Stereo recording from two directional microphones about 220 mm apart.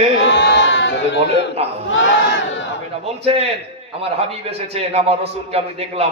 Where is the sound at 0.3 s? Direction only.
50° left (ahead or behind).